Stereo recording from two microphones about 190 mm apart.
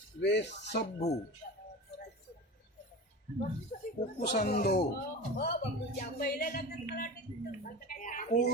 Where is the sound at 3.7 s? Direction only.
50° left (ahead or behind).